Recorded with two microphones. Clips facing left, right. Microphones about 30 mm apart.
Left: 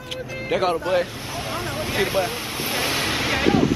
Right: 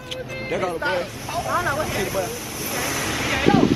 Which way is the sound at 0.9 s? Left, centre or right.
Centre.